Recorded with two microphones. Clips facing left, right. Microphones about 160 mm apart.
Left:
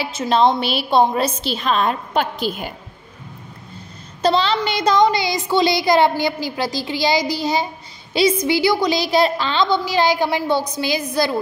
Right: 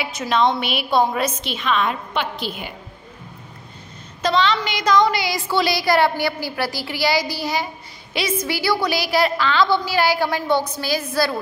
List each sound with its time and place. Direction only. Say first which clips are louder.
0.0 s a woman's voice: left 3 dB; 30° left (ahead or behind); by 2.7 s 45° left (ahead or behind)
4.2 s a woman's voice: left 2 dB; 30° left (ahead or behind)